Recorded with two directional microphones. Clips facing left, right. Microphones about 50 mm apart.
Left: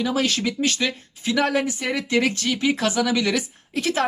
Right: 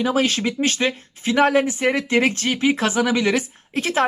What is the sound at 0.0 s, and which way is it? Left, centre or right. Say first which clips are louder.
Speech: right 3 dB; right.